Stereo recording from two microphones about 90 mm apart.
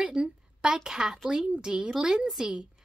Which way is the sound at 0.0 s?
10° right (ahead or behind).